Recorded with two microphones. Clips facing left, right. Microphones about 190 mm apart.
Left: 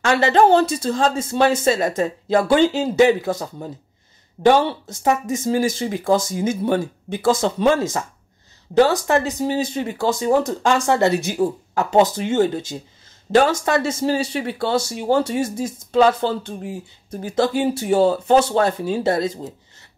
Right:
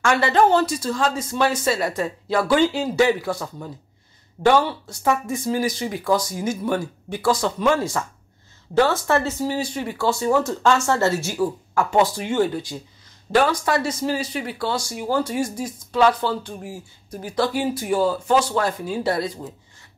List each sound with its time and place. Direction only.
0.0 s speech: 25° left (ahead or behind)